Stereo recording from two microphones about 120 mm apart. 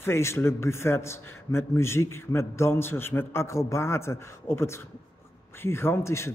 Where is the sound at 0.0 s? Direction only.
20° left (ahead or behind).